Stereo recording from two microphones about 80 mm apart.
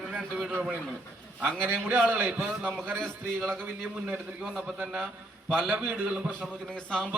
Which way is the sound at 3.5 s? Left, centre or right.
Right.